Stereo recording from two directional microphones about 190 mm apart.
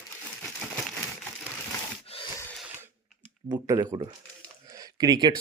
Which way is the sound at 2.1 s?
30° left (ahead or behind).